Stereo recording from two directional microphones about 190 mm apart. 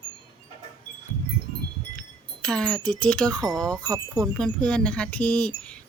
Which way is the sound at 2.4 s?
5° left (ahead or behind).